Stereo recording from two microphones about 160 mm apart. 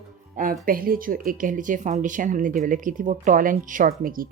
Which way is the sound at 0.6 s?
65° right (ahead or behind).